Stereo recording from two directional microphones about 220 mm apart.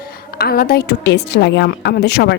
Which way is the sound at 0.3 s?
45° left (ahead or behind).